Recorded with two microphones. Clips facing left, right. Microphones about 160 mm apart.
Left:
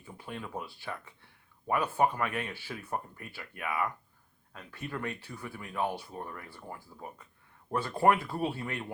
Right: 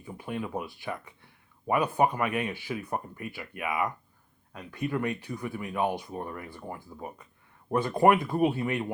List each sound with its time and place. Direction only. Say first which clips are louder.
0.0 s speech: right 7 dB; 15° right (ahead or behind)